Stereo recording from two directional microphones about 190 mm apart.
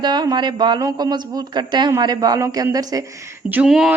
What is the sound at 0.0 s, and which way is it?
Speech, 20° right (ahead or behind).